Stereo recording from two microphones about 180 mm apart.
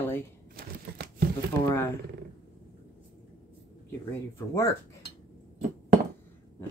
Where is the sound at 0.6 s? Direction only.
55° right (ahead or behind).